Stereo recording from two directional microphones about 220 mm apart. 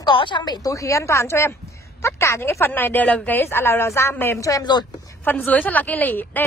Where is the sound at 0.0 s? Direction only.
20° left (ahead or behind).